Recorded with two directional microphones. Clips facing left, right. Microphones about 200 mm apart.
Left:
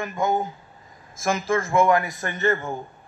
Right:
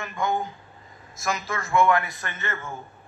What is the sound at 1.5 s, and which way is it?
Speech, 40° left (ahead or behind).